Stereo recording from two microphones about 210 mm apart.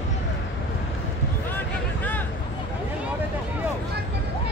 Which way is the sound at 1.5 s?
10° left (ahead or behind).